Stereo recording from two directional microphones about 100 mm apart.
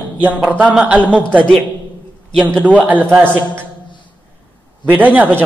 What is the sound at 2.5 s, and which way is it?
Speech, 15° right (ahead or behind).